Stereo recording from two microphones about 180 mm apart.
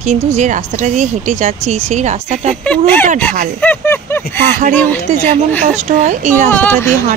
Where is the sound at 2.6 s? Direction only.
10° left (ahead or behind).